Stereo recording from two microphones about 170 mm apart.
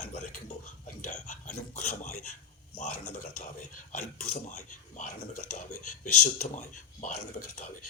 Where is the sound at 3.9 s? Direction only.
45° left (ahead or behind).